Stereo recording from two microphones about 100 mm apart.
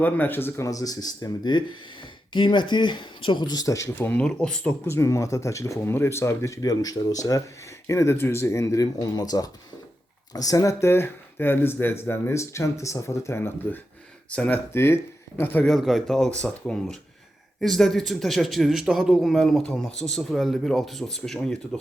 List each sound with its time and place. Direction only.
0.0 s speech: 20° left (ahead or behind); by 3.8 s 40° left (ahead or behind)
3.8 s speech: 20° left (ahead or behind)
4.2 s speech: 10° left (ahead or behind)
4.9 s speech: 25° left (ahead or behind)
14.3 s speech: 10° left (ahead or behind)
14.7 s speech: 25° left (ahead or behind)
15.6 s a man's voice: centre (ahead or behind)